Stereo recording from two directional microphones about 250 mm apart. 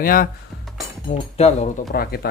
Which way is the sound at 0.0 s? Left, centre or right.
Left.